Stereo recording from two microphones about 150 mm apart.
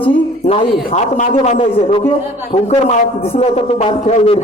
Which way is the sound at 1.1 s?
55° left (ahead or behind).